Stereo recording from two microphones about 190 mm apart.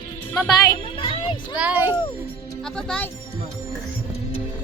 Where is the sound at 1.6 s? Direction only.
10° right (ahead or behind).